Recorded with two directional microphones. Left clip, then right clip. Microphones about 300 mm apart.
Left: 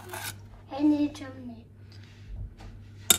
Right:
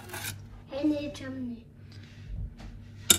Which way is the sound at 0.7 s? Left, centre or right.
Left.